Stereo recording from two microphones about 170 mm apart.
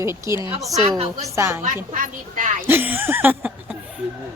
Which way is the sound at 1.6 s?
50° right (ahead or behind).